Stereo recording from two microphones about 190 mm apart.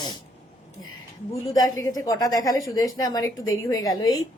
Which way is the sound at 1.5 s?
20° left (ahead or behind).